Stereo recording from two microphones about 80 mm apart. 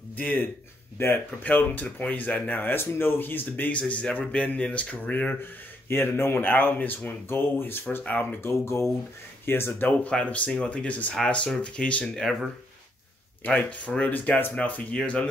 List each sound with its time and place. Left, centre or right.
0.2 s speech: centre
5.4 s speech: left; by 12.4 s centre
13.4 s speech: centre